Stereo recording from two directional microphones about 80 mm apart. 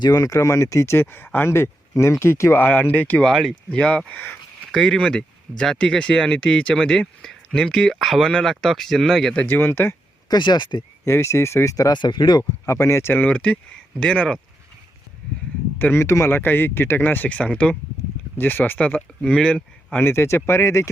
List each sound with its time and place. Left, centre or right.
0.0 s speech: left
3.2 s speech: centre
9.3 s speech: centre
9.6 s speech: left
10.2 s speech: left
11.0 s speech: left
11.9 s speech: left
12.6 s speech: left
13.2 s speech: centre
15.8 s speech: left; by 20.0 s centre
20.0 s speech: left